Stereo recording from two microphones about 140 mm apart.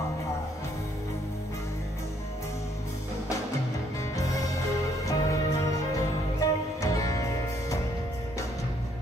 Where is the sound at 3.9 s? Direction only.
25° left (ahead or behind).